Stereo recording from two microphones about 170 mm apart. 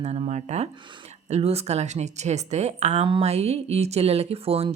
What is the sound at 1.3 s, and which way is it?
A woman's voice, 40° right (ahead or behind).